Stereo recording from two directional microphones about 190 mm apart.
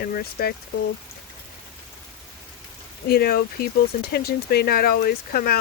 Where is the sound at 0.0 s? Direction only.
50° left (ahead or behind).